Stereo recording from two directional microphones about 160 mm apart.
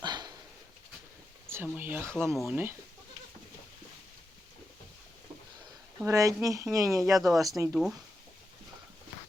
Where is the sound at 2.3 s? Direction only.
Centre (ahead or behind).